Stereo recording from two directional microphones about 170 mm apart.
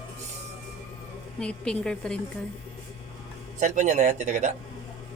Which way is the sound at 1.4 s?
5° left (ahead or behind).